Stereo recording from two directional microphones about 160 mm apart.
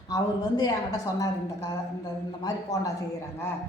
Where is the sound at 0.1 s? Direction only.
25° left (ahead or behind).